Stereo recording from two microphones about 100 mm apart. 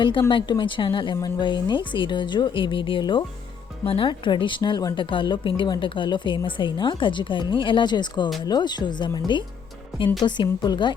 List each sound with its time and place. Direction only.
0.3 s speech: 50° left (ahead or behind)
1.1 s a woman's voice: 45° left (ahead or behind)